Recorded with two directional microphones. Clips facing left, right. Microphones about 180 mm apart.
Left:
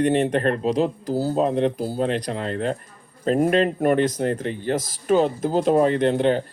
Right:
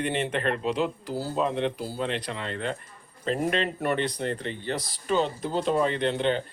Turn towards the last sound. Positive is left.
turn(degrees=45)  # may be behind; listen again after turning